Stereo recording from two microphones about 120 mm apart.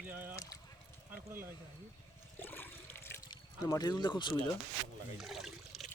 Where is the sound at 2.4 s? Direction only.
15° left (ahead or behind).